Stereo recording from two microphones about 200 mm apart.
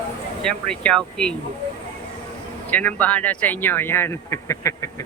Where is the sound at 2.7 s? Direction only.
5° left (ahead or behind).